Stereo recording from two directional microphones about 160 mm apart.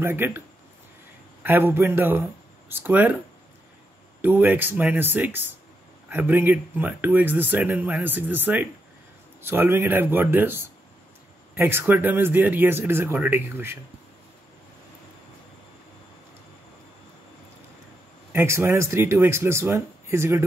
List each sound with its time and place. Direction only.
0.0 s speech: 15° right (ahead or behind)
1.4 s speech: 15° right (ahead or behind)
4.2 s speech: 10° right (ahead or behind)
18.3 s speech: 15° right (ahead or behind)